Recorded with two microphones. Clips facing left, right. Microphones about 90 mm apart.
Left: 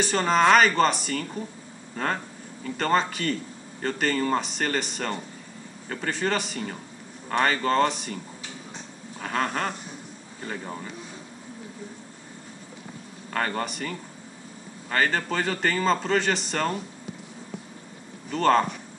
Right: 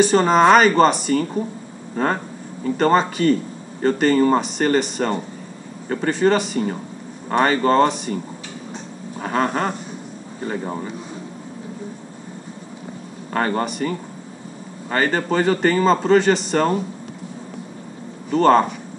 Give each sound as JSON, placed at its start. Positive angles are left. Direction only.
{"t": 0.1, "sound": "a man's voice", "side_deg": -15}
{"t": 9.2, "sound": "a man's voice", "side_deg": -15}
{"t": 13.3, "sound": "a man's voice", "side_deg": -15}
{"t": 18.3, "sound": "a man's voice", "side_deg": -15}